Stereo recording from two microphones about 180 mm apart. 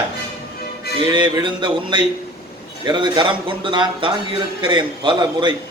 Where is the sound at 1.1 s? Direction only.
25° right (ahead or behind).